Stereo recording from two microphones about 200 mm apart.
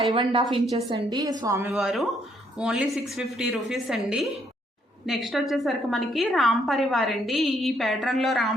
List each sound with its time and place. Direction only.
0.1 s a woman's voice: 25° right (ahead or behind)
1.7 s a woman's voice: centre (ahead or behind)